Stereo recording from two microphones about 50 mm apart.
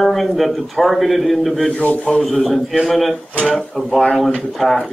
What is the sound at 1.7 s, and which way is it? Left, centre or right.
Speech, left.